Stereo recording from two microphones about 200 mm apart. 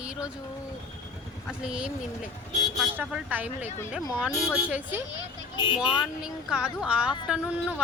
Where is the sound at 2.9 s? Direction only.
10° right (ahead or behind).